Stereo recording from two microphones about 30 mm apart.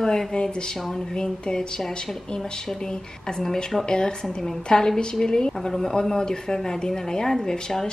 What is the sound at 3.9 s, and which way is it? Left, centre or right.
Speech, left.